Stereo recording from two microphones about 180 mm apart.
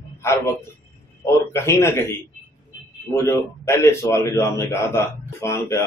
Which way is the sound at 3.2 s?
15° left (ahead or behind).